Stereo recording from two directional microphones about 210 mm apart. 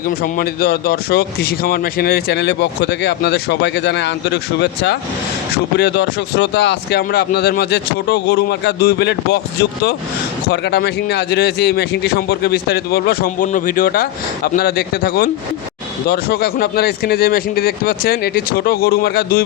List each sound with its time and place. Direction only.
0.1 s speech: 45° left (ahead or behind)